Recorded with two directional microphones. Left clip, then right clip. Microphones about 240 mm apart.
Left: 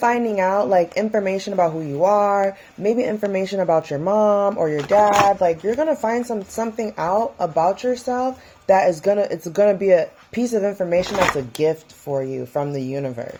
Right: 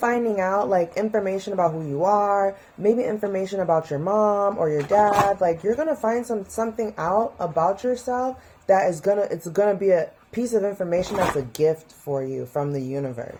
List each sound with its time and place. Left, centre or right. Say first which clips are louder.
0.0 s speech: left 4 dB; left